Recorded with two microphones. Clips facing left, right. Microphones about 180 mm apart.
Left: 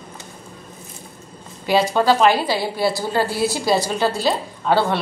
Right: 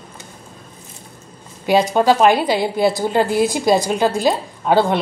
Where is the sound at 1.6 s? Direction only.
15° right (ahead or behind).